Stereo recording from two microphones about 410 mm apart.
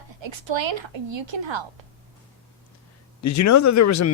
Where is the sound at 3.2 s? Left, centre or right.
Left.